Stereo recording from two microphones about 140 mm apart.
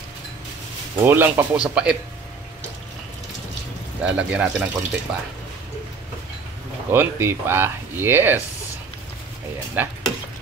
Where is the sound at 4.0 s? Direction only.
10° right (ahead or behind).